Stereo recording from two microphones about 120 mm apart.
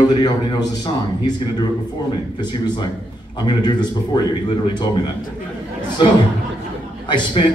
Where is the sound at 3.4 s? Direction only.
35° left (ahead or behind).